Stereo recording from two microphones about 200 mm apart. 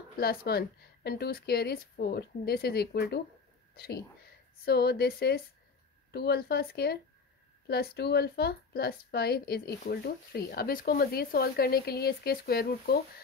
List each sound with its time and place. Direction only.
0.2 s a woman's voice: 50° left (ahead or behind)